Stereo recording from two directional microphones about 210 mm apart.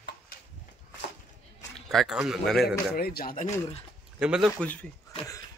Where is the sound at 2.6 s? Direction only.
45° left (ahead or behind).